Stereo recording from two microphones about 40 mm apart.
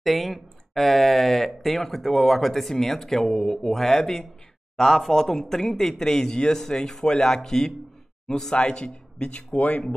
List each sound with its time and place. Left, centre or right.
0.0 s speech: centre
8.5 s speech: left